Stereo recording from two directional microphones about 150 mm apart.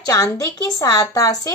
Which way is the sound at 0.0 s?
20° left (ahead or behind).